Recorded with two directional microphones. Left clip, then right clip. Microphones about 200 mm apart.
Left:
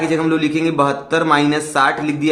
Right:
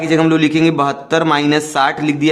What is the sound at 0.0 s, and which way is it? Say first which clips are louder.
A man's voice: right 4 dB; 45° right (ahead or behind).